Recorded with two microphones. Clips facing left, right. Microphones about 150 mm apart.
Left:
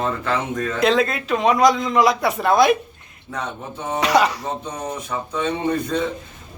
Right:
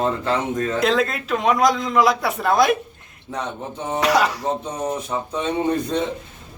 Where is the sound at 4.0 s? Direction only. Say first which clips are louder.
Left 1 dB; centre (ahead or behind).